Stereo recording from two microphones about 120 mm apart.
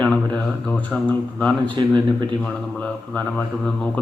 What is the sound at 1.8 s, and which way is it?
Speech, 40° right (ahead or behind).